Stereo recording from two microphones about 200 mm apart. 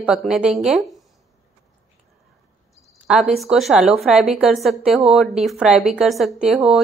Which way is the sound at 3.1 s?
5° right (ahead or behind).